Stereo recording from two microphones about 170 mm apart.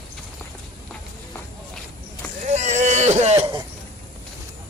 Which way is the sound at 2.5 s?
40° right (ahead or behind).